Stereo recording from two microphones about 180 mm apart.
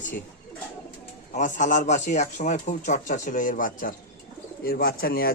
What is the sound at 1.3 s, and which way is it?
Speech, 45° left (ahead or behind).